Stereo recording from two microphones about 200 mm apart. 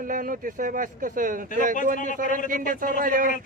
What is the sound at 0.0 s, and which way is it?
Speech, 45° right (ahead or behind).